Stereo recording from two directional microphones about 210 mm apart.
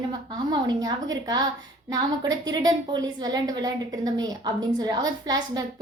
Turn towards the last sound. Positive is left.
turn(degrees=-20)  # may be behind; listen again after turning